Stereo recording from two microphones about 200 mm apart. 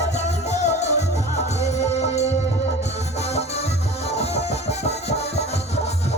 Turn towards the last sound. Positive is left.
turn(degrees=30)  # may be behind; listen again after turning